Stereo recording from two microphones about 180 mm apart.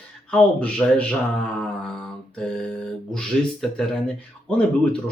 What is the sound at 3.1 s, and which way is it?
Speech, 5° left (ahead or behind).